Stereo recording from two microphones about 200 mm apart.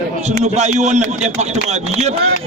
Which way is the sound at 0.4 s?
35° right (ahead or behind).